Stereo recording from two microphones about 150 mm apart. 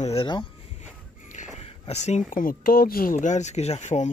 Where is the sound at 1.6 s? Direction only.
45° left (ahead or behind).